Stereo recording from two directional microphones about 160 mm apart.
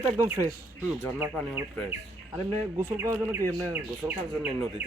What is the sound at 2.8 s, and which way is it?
Speech, 15° right (ahead or behind).